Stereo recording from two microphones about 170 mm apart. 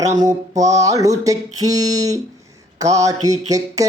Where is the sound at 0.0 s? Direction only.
20° right (ahead or behind).